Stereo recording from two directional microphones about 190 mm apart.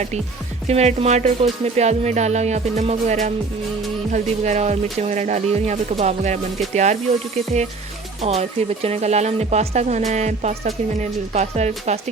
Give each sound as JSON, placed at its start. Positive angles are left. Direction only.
{"t": 0.7, "sound": "speech", "side_deg": -35}